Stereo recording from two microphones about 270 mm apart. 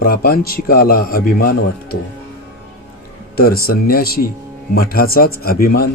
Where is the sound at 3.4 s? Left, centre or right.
Left.